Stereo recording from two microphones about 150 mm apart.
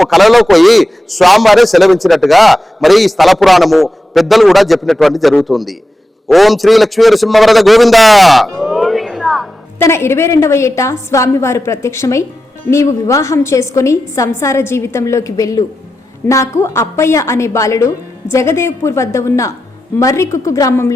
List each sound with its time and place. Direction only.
0.0 s a man's voice: centre (ahead or behind)
9.7 s a woman's voice: 15° left (ahead or behind)